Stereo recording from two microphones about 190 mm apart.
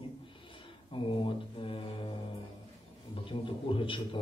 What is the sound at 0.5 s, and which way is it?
Mantra, 25° left (ahead or behind).